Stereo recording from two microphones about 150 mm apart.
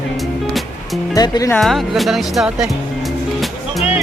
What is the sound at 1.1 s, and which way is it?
Speech, 25° left (ahead or behind).